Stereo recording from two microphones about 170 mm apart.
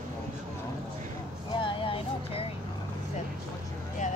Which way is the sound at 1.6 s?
30° left (ahead or behind).